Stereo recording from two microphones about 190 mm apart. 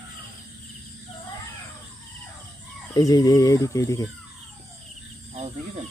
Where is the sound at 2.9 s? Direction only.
20° left (ahead or behind).